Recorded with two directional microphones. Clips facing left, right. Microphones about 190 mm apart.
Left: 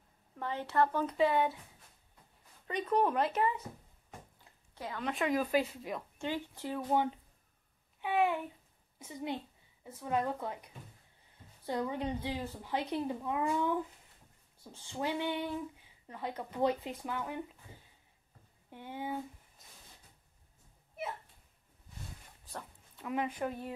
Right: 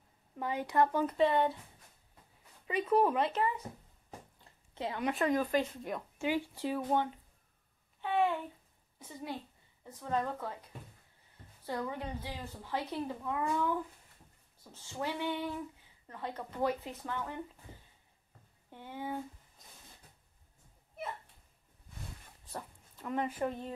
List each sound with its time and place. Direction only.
0.4 s a woman's voice: 10° right (ahead or behind)
1.0 s speech: centre (ahead or behind)
2.6 s speech: 5° right (ahead or behind)
4.7 s speech: 25° right (ahead or behind)
5.1 s speech: 5° left (ahead or behind)
6.2 s a woman's voice: 10° right (ahead or behind)
8.0 s a sound: 10° left (ahead or behind)
9.0 s a woman's voice: 15° left (ahead or behind)
18.7 s speech: 15° left (ahead or behind)
22.5 s a sound: 5° right (ahead or behind)
23.0 s speech: 5° left (ahead or behind)